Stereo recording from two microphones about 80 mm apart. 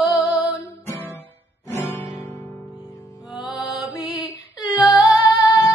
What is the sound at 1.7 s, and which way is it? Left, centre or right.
Music, left.